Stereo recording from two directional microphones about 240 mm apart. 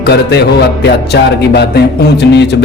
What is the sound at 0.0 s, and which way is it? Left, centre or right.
Music, left.